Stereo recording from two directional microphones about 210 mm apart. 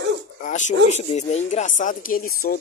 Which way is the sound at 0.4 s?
35° left (ahead or behind).